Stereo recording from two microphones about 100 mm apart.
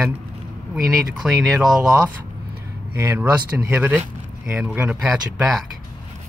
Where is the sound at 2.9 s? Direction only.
20° right (ahead or behind).